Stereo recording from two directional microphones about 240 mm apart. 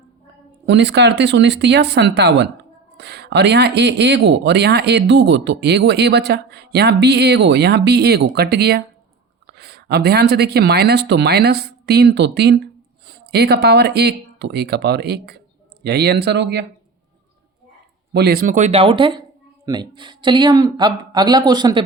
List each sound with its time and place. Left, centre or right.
0.6 s speech: right
18.1 s speech: right; by 21.8 s centre